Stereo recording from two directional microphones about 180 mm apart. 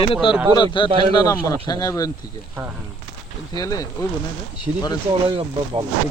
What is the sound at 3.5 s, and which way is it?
Speech, 20° left (ahead or behind).